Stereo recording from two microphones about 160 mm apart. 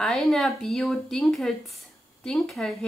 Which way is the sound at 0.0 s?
5° left (ahead or behind).